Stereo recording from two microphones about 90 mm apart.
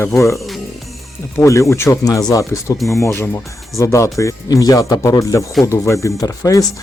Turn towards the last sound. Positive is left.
turn(degrees=40)  # may be behind; listen again after turning